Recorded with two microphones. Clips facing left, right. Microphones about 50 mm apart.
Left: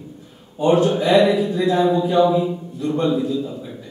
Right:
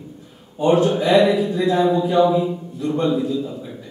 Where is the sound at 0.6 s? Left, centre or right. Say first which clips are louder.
Even; centre.